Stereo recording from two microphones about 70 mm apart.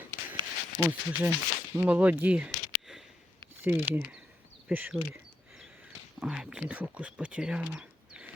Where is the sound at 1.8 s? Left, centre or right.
Right.